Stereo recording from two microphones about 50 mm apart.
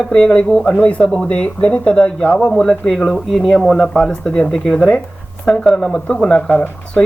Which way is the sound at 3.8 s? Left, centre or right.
Left.